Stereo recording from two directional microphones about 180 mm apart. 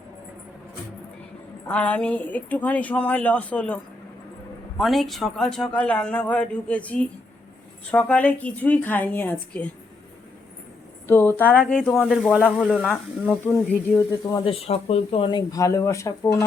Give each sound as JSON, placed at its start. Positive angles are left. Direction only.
{"t": 1.6, "sound": "a woman's voice", "side_deg": 5}
{"t": 4.8, "sound": "a woman's voice", "side_deg": 0}
{"t": 11.1, "sound": "a woman's voice", "side_deg": 10}
{"t": 14.3, "sound": "speech", "side_deg": 25}